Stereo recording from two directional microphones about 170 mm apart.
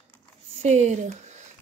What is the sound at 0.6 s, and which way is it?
Speech, 40° right (ahead or behind).